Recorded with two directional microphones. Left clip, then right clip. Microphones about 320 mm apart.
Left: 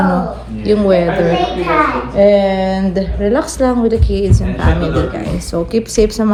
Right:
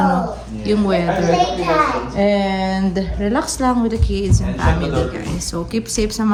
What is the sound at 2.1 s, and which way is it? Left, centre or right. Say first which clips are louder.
A woman's voice: left 9 dB; centre.